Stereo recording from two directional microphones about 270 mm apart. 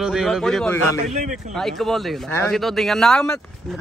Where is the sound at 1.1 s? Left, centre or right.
Right.